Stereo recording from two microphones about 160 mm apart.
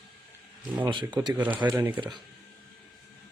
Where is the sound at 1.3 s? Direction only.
10° right (ahead or behind).